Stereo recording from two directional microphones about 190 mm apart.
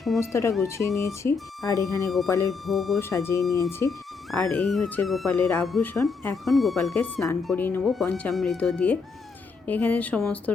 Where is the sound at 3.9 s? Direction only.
Centre (ahead or behind).